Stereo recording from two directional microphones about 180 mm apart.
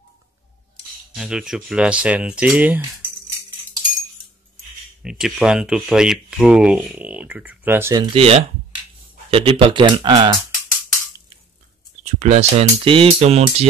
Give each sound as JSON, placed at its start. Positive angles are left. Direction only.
{"t": 1.1, "sound": "speech", "side_deg": -5}
{"t": 5.0, "sound": "speech", "side_deg": -5}
{"t": 12.0, "sound": "speech", "side_deg": -35}